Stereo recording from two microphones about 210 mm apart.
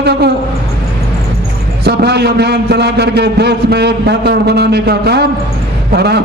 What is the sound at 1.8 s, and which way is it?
A man's voice, 50° right (ahead or behind).